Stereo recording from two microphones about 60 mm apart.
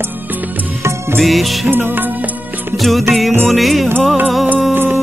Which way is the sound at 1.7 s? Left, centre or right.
Right.